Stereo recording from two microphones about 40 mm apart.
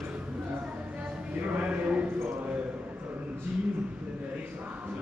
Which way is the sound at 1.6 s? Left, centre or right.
Right.